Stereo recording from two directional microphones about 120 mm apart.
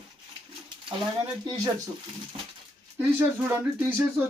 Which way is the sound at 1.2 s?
35° right (ahead or behind).